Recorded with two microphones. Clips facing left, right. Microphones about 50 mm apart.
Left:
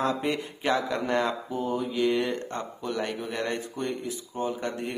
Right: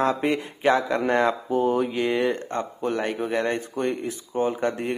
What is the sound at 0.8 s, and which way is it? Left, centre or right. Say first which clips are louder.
Speech: right 5 dB; right.